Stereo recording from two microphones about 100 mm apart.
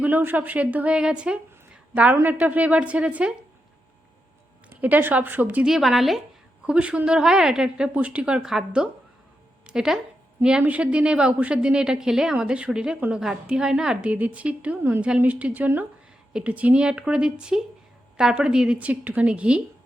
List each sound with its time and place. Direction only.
0.0 s a woman's voice: 20° right (ahead or behind)
4.8 s a woman's voice: 20° right (ahead or behind)
5.6 s a woman's voice: 5° right (ahead or behind)